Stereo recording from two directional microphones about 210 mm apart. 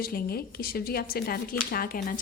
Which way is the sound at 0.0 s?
45° left (ahead or behind).